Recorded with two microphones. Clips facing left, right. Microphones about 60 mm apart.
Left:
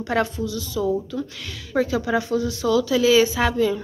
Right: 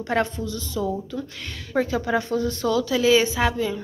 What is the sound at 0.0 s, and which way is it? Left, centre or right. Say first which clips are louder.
A woman's voice: left 1 dB; right.